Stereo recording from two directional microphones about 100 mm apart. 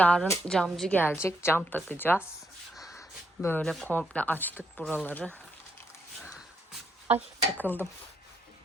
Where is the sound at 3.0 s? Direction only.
25° left (ahead or behind).